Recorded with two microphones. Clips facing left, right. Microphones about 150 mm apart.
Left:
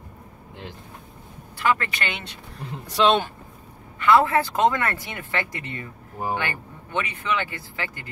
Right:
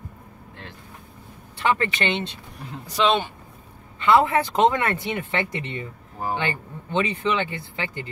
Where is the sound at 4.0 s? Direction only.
20° right (ahead or behind).